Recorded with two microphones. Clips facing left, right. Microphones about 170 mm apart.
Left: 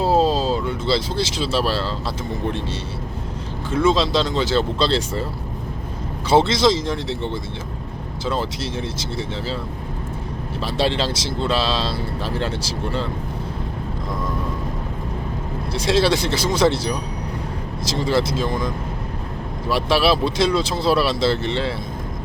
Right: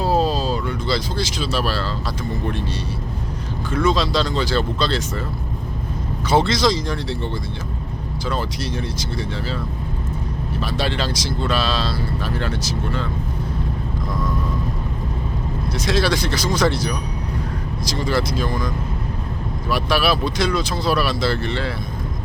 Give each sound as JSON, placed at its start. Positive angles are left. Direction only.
{"t": 0.0, "sound": "a sound", "side_deg": 25}
{"t": 3.7, "sound": "speech", "side_deg": 25}
{"t": 6.2, "sound": "speech", "side_deg": 25}
{"t": 10.6, "sound": "speech", "side_deg": 25}
{"t": 15.7, "sound": "speech", "side_deg": 30}